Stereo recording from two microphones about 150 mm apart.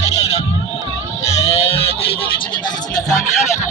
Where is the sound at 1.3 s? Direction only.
45° left (ahead or behind).